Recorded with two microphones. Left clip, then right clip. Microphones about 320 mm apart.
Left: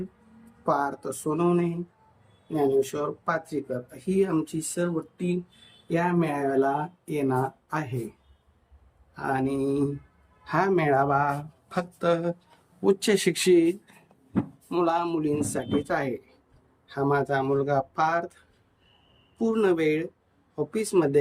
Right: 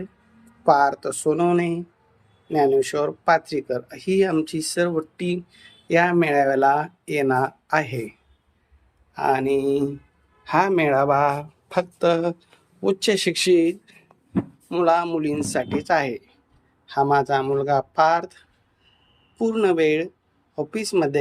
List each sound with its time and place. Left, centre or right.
0.6 s speech: centre
5.9 s speech: centre
9.1 s speech: centre
19.4 s speech: centre